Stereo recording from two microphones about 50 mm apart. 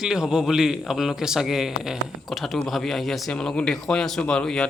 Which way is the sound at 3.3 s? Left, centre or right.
Centre.